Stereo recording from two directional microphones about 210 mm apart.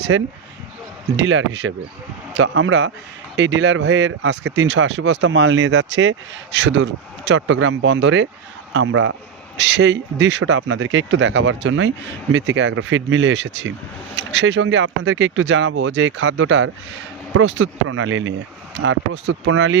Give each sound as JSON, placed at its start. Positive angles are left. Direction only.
{"t": 0.1, "sound": "a man's voice", "side_deg": -70}
{"t": 8.7, "sound": "a man's voice", "side_deg": -70}
{"t": 9.6, "sound": "speech", "side_deg": -55}